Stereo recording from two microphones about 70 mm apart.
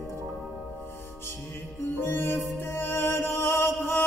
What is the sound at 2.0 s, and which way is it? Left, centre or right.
Music, left.